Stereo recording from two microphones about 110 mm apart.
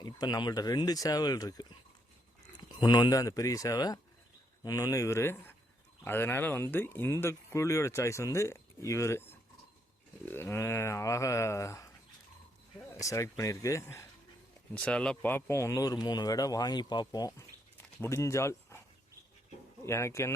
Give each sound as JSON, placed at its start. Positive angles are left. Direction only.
{"t": 0.0, "sound": "speech", "side_deg": 40}
{"t": 2.6, "sound": "speech", "side_deg": 40}
{"t": 10.2, "sound": "speech", "side_deg": 20}
{"t": 12.9, "sound": "speech", "side_deg": 30}
{"t": 14.8, "sound": "speech", "side_deg": 10}
{"t": 19.8, "sound": "speech", "side_deg": 25}